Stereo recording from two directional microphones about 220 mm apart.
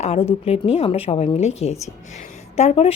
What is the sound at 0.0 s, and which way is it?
A woman's voice, 30° left (ahead or behind).